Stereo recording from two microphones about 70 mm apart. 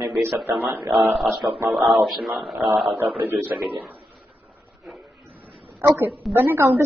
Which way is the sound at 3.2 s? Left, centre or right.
Right.